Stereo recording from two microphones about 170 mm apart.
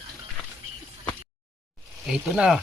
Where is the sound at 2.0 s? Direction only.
5° right (ahead or behind).